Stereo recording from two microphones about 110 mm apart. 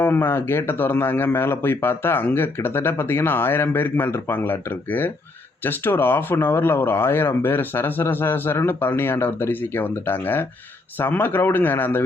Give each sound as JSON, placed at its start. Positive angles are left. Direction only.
{"t": 0.0, "sound": "speech", "side_deg": 20}